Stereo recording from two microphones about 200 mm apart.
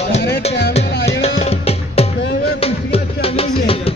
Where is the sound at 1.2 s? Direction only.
30° left (ahead or behind).